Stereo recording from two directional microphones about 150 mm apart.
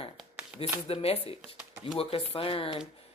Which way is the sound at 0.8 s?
40° left (ahead or behind).